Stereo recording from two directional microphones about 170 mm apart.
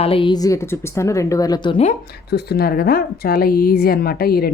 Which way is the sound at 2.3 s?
70° left (ahead or behind).